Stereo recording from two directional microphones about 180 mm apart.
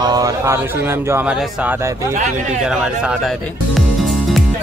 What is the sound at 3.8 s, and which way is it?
Music, centre (ahead or behind).